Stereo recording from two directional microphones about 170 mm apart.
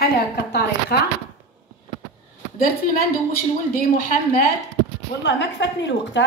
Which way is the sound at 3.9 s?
55° left (ahead or behind).